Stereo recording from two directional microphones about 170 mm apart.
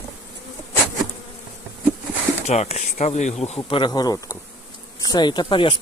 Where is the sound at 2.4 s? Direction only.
40° left (ahead or behind).